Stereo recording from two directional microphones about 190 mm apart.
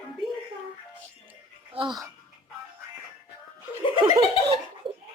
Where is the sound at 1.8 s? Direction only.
30° right (ahead or behind).